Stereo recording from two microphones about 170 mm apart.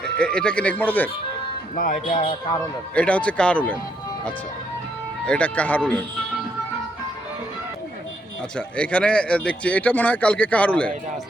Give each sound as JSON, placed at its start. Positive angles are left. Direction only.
{"t": 0.0, "sound": "speech", "side_deg": 5}
{"t": 1.7, "sound": "speech", "side_deg": 50}
{"t": 2.9, "sound": "speech", "side_deg": 10}
{"t": 5.2, "sound": "speech", "side_deg": 5}
{"t": 8.5, "sound": "speech", "side_deg": 5}